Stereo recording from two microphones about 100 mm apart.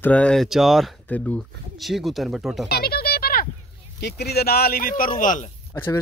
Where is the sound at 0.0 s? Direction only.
15° left (ahead or behind).